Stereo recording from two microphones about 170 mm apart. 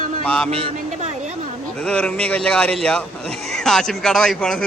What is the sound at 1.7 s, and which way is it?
Speech, 5° left (ahead or behind).